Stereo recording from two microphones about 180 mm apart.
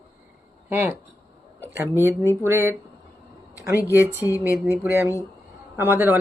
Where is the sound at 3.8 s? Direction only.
15° left (ahead or behind).